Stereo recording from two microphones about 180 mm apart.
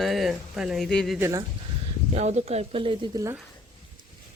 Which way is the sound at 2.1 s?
40° right (ahead or behind).